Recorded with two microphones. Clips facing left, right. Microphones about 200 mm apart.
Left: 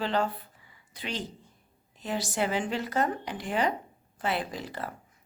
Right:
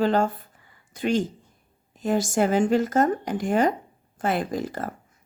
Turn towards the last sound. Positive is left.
turn(degrees=-45)  # may be behind; listen again after turning